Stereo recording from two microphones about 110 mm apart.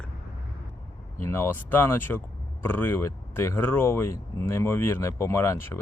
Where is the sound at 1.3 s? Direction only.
20° left (ahead or behind).